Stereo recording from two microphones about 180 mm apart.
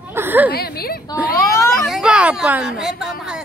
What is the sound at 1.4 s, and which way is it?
Speech, 15° left (ahead or behind).